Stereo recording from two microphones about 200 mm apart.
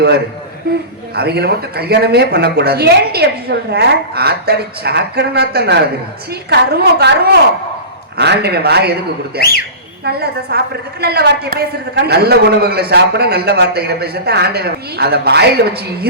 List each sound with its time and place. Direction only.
1.1 s a man's voice: 50° right (ahead or behind)
8.2 s a man's voice: 55° right (ahead or behind)